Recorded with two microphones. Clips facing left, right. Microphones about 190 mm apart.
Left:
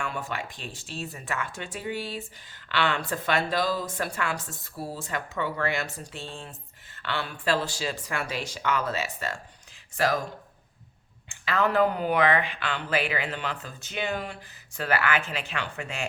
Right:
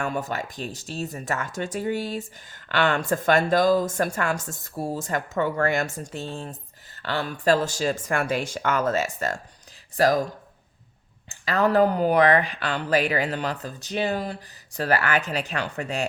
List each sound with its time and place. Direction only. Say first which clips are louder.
0.0 s speech: right 5 dB; 40° right (ahead or behind)
11.3 s speech: right 4 dB; 40° right (ahead or behind)